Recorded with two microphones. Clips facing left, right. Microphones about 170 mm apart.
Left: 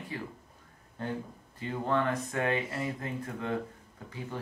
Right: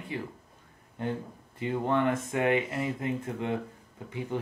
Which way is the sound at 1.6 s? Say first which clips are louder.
Right 3 dB; 20° right (ahead or behind).